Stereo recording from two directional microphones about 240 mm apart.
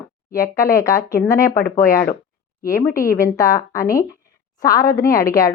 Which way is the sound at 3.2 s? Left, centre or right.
Centre.